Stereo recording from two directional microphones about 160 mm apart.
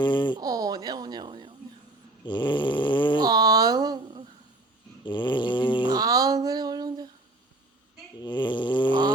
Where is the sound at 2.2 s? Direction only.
30° left (ahead or behind).